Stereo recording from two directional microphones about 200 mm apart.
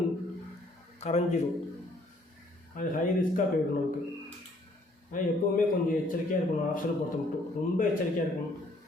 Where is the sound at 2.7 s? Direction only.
40° left (ahead or behind).